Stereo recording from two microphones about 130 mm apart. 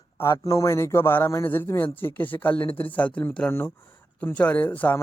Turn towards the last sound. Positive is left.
turn(degrees=15)  # may be behind; listen again after turning